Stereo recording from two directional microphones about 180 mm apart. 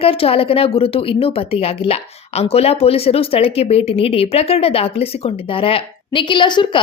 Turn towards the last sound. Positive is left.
turn(degrees=25)  # may be behind; listen again after turning